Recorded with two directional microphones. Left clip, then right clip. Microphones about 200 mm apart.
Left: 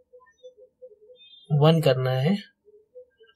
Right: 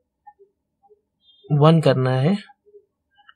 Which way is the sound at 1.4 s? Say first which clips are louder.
Right 4 dB; 20° right (ahead or behind).